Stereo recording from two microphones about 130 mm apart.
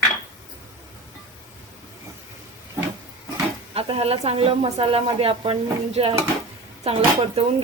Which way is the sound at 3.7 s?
45° right (ahead or behind).